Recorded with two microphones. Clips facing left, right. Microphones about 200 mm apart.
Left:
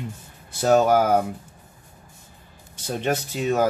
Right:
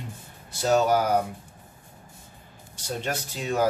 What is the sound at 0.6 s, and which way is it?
Speech, 55° left (ahead or behind).